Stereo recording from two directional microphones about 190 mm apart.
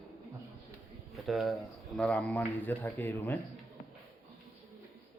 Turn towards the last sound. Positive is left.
turn(degrees=10)  # may be behind; listen again after turning